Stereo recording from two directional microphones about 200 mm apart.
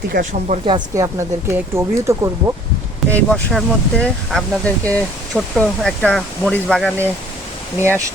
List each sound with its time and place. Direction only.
0.1 s speech: 40° right (ahead or behind)
0.7 s speech: 15° right (ahead or behind)
3.2 s speech: 5° left (ahead or behind)
7.8 s speech: 10° right (ahead or behind)